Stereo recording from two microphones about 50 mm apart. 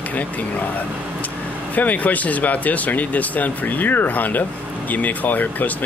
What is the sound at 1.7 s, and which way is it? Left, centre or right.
Speech, left.